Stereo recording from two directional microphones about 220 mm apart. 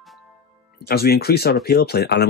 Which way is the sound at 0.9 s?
45° left (ahead or behind).